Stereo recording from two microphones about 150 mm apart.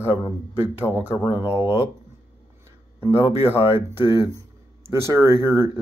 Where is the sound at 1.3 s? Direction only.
10° right (ahead or behind).